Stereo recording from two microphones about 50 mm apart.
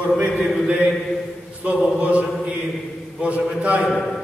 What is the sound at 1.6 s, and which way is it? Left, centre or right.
Chant, right.